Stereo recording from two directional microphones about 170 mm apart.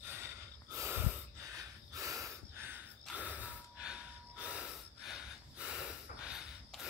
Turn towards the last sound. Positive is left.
turn(degrees=-5)  # may be behind; listen again after turning